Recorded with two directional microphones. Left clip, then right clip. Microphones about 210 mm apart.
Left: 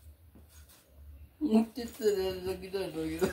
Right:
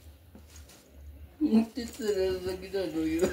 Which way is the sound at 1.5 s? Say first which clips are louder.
Right 1 dB; 40° left (ahead or behind).